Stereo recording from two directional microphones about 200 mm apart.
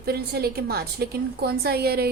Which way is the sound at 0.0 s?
50° right (ahead or behind).